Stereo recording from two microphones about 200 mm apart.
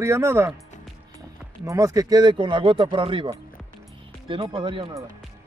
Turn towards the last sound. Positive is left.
turn(degrees=-25)  # may be behind; listen again after turning